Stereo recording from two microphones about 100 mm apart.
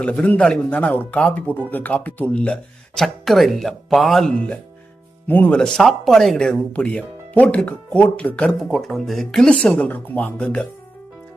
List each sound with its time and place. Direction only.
0.0 s speech: 10° left (ahead or behind)
5.3 s speech: 20° left (ahead or behind)
5.5 s speech: 5° left (ahead or behind)
8.5 s speech: centre (ahead or behind)